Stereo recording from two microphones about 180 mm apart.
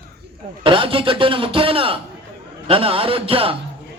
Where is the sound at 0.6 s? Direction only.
30° right (ahead or behind).